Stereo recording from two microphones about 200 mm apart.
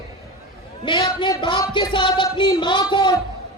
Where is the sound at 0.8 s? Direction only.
20° left (ahead or behind).